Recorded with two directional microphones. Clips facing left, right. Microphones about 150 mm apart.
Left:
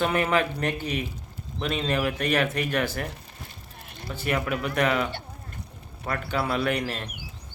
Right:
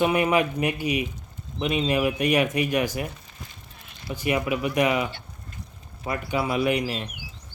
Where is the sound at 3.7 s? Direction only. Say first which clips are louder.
Left 4 dB; 50° left (ahead or behind).